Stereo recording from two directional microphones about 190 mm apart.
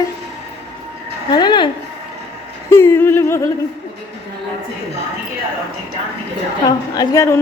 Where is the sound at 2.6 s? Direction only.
15° left (ahead or behind).